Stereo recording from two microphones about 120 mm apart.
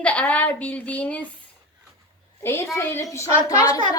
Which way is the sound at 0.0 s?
10° left (ahead or behind).